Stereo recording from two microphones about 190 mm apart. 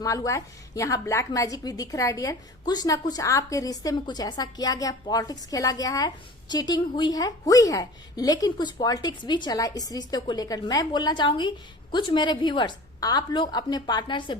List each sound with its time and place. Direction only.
0.0 s a woman's voice: 15° left (ahead or behind)